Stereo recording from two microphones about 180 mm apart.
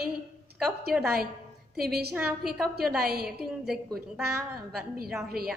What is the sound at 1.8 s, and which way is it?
A woman's voice, 60° right (ahead or behind).